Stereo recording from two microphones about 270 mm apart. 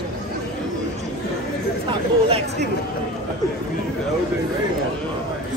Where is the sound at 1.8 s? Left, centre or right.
Right.